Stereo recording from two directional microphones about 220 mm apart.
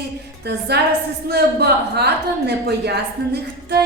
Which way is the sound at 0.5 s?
45° right (ahead or behind).